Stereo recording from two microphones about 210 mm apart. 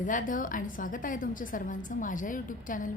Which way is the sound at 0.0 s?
40° left (ahead or behind).